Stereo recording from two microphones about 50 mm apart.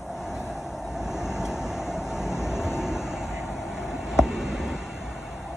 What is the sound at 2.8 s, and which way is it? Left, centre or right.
Vehicle, centre.